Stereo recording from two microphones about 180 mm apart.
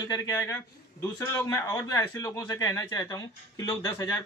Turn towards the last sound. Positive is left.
turn(degrees=15)  # may be behind; listen again after turning